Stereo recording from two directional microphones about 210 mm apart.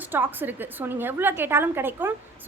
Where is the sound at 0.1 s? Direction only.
10° right (ahead or behind).